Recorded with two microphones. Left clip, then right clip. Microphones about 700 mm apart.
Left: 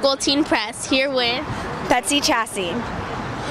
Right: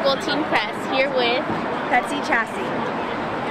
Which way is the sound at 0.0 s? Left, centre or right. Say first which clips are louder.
Left 2 dB; left.